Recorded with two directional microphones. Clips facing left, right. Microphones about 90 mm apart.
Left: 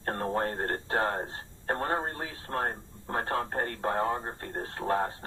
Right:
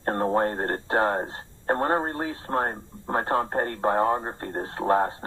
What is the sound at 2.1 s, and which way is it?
Speech, 25° right (ahead or behind).